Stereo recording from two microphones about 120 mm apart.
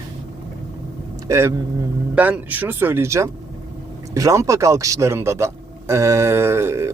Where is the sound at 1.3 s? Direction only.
25° right (ahead or behind).